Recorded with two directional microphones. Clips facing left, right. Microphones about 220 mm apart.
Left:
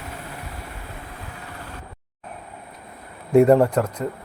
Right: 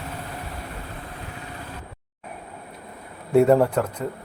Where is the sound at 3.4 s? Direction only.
Centre (ahead or behind).